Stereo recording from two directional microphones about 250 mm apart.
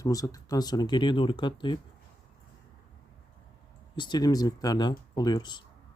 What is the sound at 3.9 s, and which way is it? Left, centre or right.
Speech, centre.